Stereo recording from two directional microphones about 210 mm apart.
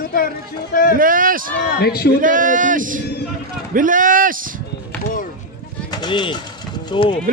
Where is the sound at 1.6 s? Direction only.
45° left (ahead or behind).